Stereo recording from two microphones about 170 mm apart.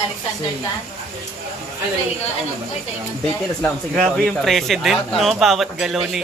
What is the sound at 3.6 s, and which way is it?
Speech, 5° left (ahead or behind).